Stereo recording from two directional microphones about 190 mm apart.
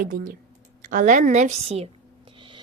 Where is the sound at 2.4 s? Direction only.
25° right (ahead or behind).